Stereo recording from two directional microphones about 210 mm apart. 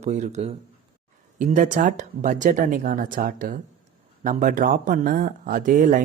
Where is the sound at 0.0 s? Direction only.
35° right (ahead or behind).